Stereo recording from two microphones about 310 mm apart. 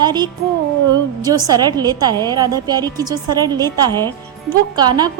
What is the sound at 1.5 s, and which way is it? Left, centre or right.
A woman's voice, centre.